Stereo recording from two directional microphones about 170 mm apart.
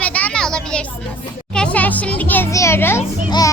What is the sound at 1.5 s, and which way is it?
Music, 10° left (ahead or behind).